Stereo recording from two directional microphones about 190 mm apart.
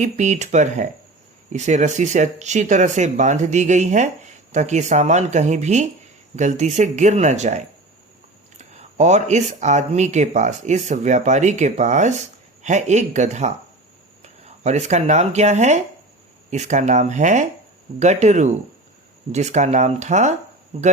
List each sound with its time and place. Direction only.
0.0 s speech: 40° right (ahead or behind)